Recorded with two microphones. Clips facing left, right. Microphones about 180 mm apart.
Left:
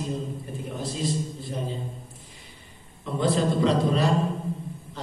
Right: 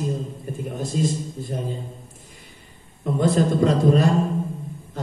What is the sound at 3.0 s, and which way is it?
A man's voice, 45° right (ahead or behind).